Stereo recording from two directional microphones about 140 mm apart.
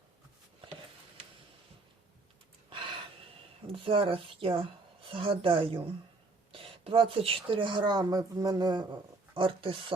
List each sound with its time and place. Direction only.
2.6 s gasp: 35° right (ahead or behind)
3.7 s a woman's voice: 40° right (ahead or behind)